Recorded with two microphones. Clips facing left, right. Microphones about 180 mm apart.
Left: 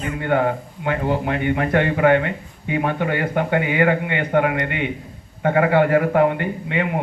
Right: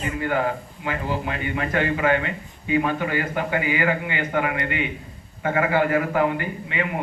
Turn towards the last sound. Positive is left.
turn(degrees=65)  # may be behind; listen again after turning